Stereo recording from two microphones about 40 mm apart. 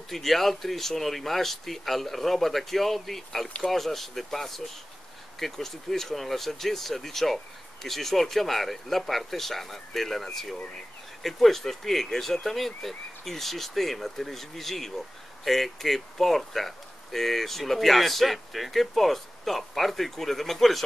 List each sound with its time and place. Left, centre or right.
0.1 s speech: centre